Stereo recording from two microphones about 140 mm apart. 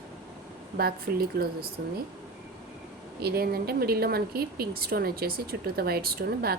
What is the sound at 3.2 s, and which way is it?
Speech, 90° right.